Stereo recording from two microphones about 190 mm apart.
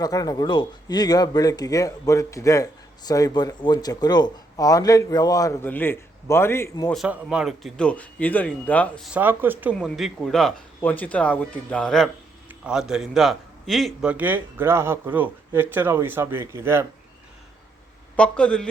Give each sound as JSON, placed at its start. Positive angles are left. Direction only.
{"t": 0.0, "sound": "speech", "side_deg": 20}
{"t": 6.9, "sound": "speech", "side_deg": 0}
{"t": 9.0, "sound": "a man's voice", "side_deg": -10}
{"t": 9.7, "sound": "a man's voice", "side_deg": 0}
{"t": 18.2, "sound": "speech", "side_deg": 5}